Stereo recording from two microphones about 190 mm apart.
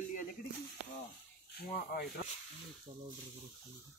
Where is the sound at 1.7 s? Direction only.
50° left (ahead or behind).